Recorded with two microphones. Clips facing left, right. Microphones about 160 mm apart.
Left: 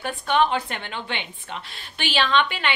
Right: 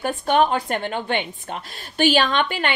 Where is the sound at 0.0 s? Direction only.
45° right (ahead or behind).